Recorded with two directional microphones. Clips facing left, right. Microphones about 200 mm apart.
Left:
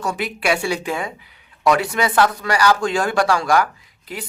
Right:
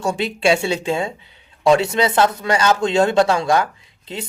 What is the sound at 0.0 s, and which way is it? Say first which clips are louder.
Speech: right 4 dB; 25° right (ahead or behind).